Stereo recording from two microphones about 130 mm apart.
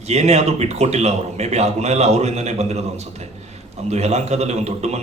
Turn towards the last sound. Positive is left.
turn(degrees=-60)  # may be behind; listen again after turning